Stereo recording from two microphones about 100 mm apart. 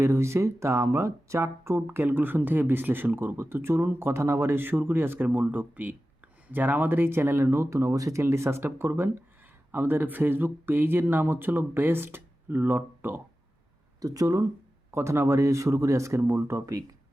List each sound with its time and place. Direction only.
0.0 s speech: 25° right (ahead or behind)
14.0 s speech: 35° right (ahead or behind)